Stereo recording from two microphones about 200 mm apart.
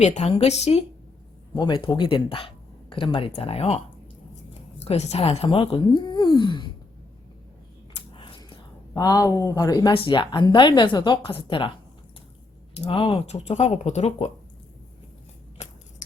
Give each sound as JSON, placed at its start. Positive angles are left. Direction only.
{"t": 0.0, "sound": "speech", "side_deg": 35}
{"t": 4.8, "sound": "speech", "side_deg": 35}
{"t": 7.9, "sound": "a sound", "side_deg": 25}
{"t": 9.0, "sound": "speech", "side_deg": 20}
{"t": 12.7, "sound": "speech", "side_deg": 25}